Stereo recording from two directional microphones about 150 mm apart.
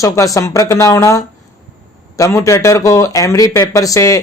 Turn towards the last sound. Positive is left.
turn(degrees=20)  # may be behind; listen again after turning